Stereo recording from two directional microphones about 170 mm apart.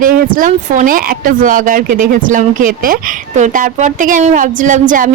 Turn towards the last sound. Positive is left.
turn(degrees=-50)  # may be behind; listen again after turning